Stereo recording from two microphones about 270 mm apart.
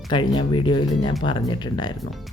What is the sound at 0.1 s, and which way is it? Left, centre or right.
Speech, centre.